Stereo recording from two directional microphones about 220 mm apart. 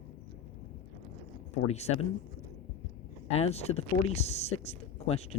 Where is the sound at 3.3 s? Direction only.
30° left (ahead or behind).